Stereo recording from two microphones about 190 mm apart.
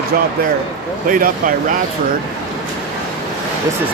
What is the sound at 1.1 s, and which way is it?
Speech, 45° right (ahead or behind).